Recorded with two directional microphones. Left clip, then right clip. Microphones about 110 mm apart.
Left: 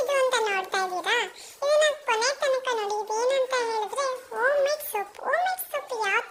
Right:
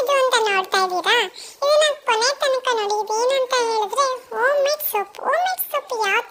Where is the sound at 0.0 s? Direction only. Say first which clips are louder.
Right 6 dB; 45° right (ahead or behind).